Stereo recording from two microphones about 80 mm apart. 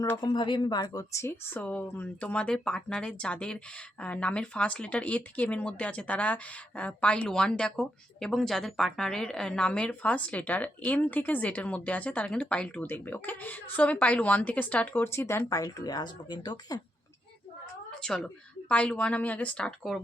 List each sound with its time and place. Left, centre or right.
0.2 s speech: left
1.1 s speech: left
15.4 s speech: left
18.0 s speech: centre